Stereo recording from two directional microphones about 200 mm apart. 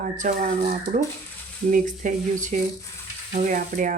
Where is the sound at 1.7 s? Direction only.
40° right (ahead or behind).